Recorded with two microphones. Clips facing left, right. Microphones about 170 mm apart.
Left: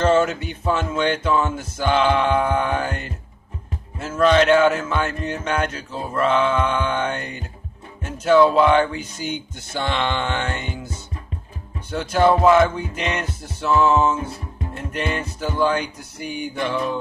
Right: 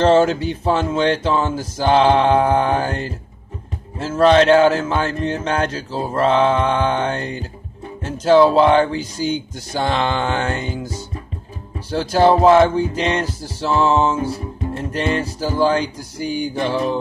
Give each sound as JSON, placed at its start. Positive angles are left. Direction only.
{"t": 0.0, "sound": "music", "side_deg": -30}
{"t": 11.9, "sound": "music", "side_deg": -35}